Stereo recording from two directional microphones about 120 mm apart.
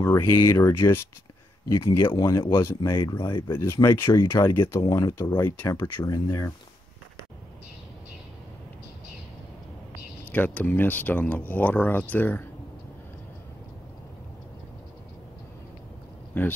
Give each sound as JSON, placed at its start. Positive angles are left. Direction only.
{"t": 0.0, "sound": "speech", "side_deg": 25}
{"t": 3.3, "sound": "speech", "side_deg": 40}
{"t": 3.5, "sound": "speech", "side_deg": 20}
{"t": 6.0, "sound": "speech", "side_deg": 30}
{"t": 10.3, "sound": "speech", "side_deg": 15}
{"t": 16.3, "sound": "speech", "side_deg": 15}